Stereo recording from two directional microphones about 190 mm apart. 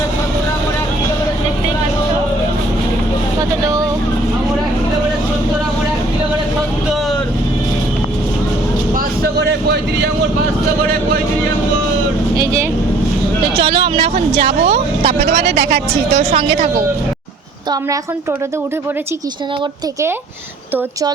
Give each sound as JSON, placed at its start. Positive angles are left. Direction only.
{"t": 3.6, "sound": "vehicle", "side_deg": -20}
{"t": 9.2, "sound": "a sound", "side_deg": -60}
{"t": 13.6, "sound": "a sound", "side_deg": -30}
{"t": 14.4, "sound": "speech", "side_deg": -35}
{"t": 15.4, "sound": "a woman's voice", "side_deg": -60}
{"t": 16.3, "sound": "speech", "side_deg": -30}